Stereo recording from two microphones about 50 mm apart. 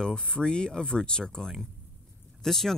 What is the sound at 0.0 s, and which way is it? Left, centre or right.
Speech, centre.